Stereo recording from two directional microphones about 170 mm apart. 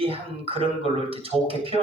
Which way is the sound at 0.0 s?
35° right (ahead or behind).